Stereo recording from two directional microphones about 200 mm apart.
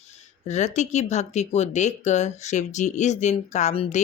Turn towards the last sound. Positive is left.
turn(degrees=30)  # may be behind; listen again after turning